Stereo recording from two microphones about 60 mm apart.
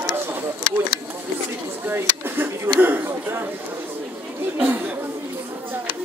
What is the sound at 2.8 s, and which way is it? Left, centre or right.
Chatter, right.